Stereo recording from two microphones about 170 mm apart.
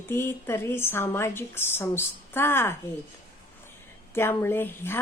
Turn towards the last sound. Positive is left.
turn(degrees=15)  # may be behind; listen again after turning